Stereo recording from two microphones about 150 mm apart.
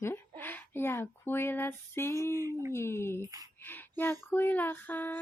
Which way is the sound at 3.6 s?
15° left (ahead or behind).